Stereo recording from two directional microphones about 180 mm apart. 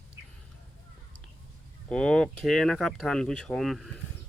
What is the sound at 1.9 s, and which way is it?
Speech, 5° left (ahead or behind).